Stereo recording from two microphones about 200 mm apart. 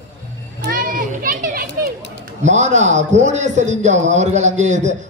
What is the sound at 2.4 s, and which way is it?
A man's voice, 35° right (ahead or behind).